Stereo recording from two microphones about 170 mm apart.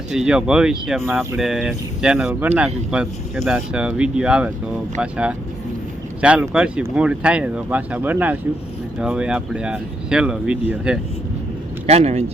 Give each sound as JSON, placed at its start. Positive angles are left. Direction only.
{"t": 0.1, "sound": "speech", "side_deg": -5}
{"t": 11.9, "sound": "speech", "side_deg": -40}